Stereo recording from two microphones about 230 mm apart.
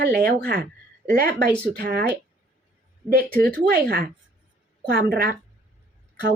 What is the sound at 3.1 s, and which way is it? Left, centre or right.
A woman's voice, right.